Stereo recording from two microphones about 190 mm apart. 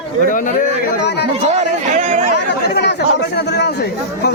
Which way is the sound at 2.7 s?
60° left (ahead or behind).